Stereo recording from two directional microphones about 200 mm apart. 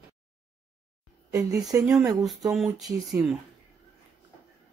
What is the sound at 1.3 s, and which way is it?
Speech, 15° right (ahead or behind).